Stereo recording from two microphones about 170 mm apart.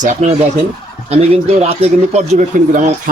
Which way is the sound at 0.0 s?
45° right (ahead or behind).